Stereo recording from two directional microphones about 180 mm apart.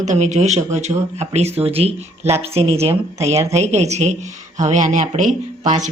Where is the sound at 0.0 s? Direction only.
40° right (ahead or behind).